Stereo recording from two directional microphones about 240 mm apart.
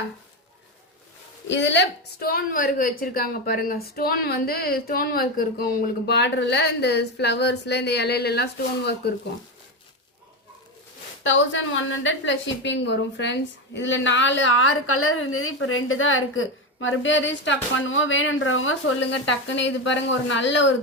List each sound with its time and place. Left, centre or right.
1.5 s a woman's voice: left
11.2 s a woman's voice: left